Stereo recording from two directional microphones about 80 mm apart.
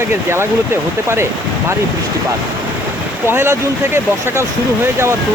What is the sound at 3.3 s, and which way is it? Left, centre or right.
Speech, right.